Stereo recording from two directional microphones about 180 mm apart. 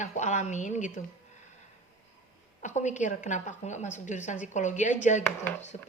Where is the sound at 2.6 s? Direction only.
40° left (ahead or behind).